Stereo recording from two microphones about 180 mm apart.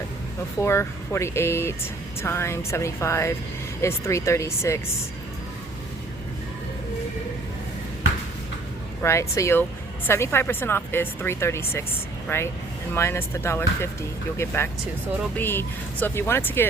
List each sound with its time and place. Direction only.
0.6 s speech: 15° left (ahead or behind)
9.0 s speech: 15° left (ahead or behind)